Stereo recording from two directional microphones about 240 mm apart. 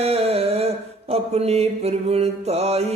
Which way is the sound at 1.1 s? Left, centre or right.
Right.